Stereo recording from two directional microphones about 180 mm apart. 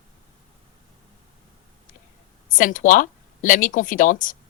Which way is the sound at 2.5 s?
45° left (ahead or behind).